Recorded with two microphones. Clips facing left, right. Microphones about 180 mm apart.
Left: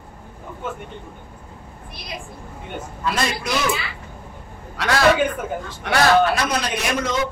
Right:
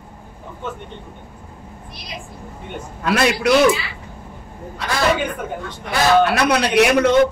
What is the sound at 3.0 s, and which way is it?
Speech, 70° right (ahead or behind).